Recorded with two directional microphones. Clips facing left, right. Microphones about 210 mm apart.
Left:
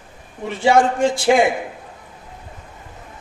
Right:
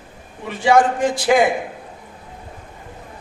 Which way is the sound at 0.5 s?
25° left (ahead or behind).